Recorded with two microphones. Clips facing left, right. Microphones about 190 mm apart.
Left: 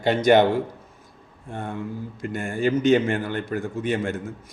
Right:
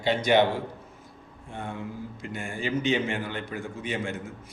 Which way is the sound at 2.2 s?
50° left (ahead or behind).